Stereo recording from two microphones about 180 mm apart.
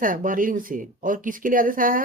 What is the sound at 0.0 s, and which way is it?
Speech, 50° right (ahead or behind).